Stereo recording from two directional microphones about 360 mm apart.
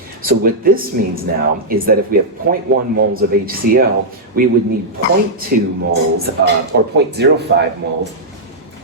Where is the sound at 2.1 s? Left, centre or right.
Right.